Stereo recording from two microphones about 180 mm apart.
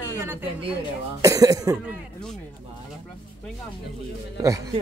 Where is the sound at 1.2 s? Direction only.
20° right (ahead or behind).